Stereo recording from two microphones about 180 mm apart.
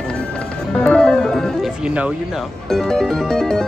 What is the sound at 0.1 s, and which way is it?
Music, 5° left (ahead or behind).